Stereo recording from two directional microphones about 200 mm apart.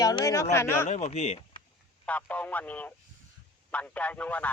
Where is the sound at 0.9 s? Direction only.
35° left (ahead or behind).